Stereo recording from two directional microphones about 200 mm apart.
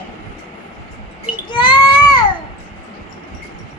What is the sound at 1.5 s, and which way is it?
Baby cry, 20° left (ahead or behind).